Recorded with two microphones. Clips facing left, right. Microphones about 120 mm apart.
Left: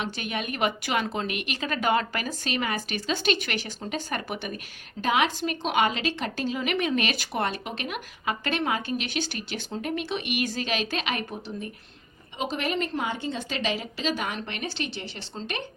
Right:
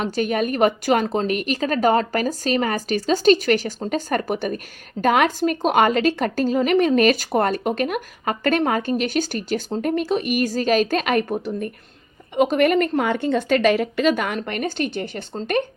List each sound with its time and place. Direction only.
0.0 s a woman's voice: 40° right (ahead or behind)